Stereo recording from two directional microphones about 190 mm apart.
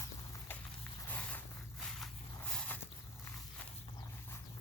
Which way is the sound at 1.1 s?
10° left (ahead or behind).